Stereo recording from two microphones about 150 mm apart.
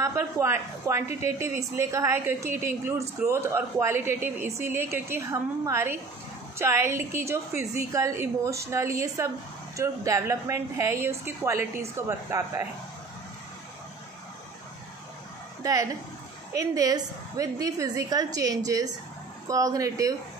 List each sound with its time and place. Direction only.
0.0 s a woman's voice: 15° right (ahead or behind)
15.6 s a woman's voice: 25° right (ahead or behind)